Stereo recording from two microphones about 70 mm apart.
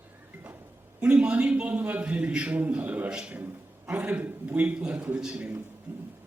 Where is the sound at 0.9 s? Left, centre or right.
Centre.